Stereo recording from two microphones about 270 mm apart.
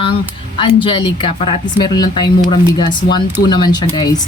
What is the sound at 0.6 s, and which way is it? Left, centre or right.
A woman's voice, centre.